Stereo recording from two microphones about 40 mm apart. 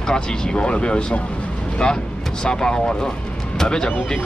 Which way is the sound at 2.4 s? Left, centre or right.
Centre.